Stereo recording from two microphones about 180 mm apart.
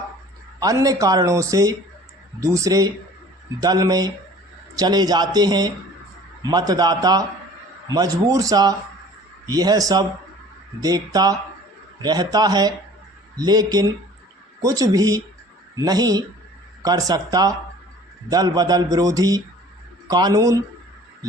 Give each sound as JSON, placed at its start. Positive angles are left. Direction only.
{"t": 0.6, "sound": "speech", "side_deg": -20}